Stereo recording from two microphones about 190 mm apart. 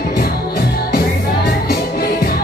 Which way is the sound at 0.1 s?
50° left (ahead or behind).